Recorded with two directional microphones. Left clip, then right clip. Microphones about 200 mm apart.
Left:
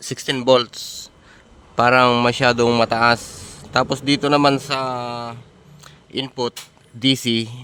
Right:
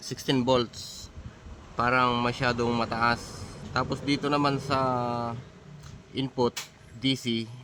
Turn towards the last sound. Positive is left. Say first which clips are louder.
# left 10 dB
turn(degrees=60)  # may be behind; listen again after turning